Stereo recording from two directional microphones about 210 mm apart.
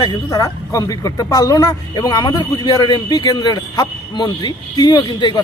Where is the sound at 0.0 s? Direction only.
20° left (ahead or behind).